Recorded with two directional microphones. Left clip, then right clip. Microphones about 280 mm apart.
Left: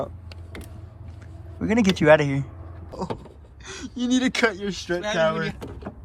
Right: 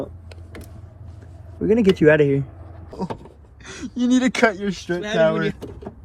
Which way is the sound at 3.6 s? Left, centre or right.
Centre.